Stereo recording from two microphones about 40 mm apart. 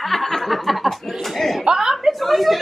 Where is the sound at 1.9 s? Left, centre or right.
Centre.